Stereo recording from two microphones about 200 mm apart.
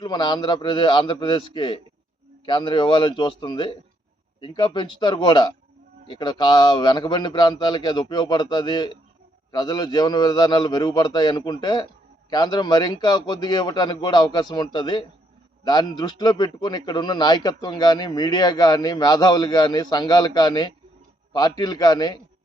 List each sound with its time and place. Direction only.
0.0 s a man's voice: 20° left (ahead or behind)